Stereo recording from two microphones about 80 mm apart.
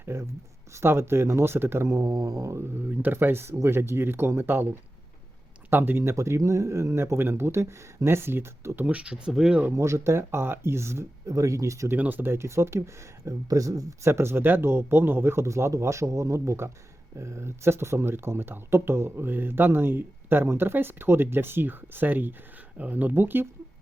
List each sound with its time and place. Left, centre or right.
0.0 s speech: right
2.7 s speech: right
8.9 s speech: centre
9.7 s speech: right
11.9 s speech: right